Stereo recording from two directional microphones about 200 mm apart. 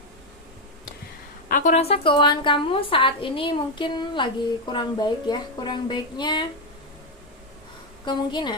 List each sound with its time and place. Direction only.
1.5 s a woman's voice: 40° left (ahead or behind); by 6.5 s 20° left (ahead or behind)
8.0 s a woman's voice: 20° left (ahead or behind)